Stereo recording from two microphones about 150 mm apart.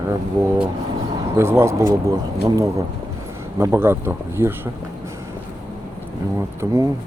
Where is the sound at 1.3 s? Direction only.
20° right (ahead or behind).